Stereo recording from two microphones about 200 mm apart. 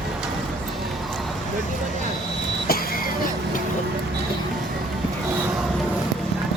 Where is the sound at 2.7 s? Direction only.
50° left (ahead or behind).